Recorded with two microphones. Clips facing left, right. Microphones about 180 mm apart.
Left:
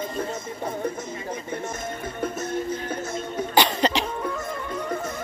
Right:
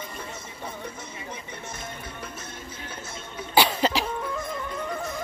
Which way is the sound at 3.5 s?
5° right (ahead or behind).